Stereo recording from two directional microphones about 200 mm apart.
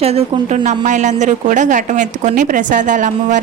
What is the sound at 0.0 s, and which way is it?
A woman's voice, 30° right (ahead or behind).